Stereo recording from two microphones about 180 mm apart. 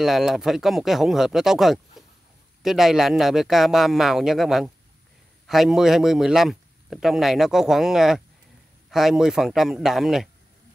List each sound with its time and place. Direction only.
0.0 s speech: centre (ahead or behind)